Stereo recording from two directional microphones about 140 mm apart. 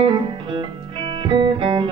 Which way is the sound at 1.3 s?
35° right (ahead or behind).